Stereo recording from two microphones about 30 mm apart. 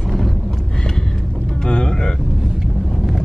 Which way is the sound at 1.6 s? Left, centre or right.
Left.